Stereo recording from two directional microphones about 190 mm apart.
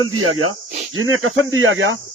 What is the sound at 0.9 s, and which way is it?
Speech, 90° right.